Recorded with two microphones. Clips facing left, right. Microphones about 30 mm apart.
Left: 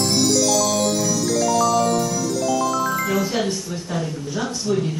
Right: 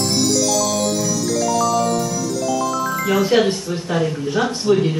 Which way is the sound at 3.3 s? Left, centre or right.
Right.